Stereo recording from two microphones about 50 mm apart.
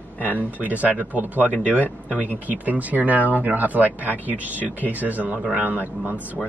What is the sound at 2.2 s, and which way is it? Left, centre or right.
Speech, right.